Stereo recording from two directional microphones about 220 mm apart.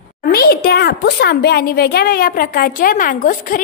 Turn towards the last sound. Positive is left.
turn(degrees=40)  # may be behind; listen again after turning